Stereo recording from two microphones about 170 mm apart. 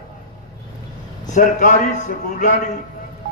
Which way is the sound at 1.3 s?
45° left (ahead or behind).